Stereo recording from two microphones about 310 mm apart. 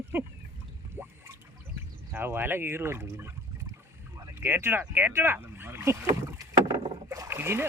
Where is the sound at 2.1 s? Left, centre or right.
Centre.